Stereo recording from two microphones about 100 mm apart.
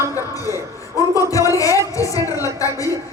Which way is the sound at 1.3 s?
35° left (ahead or behind).